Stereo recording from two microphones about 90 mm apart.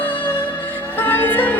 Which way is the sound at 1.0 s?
20° left (ahead or behind).